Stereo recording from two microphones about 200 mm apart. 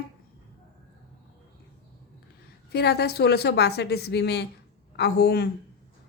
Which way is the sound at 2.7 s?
55° left (ahead or behind).